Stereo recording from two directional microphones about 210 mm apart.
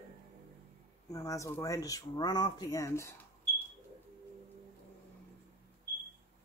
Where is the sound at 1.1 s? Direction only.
15° left (ahead or behind).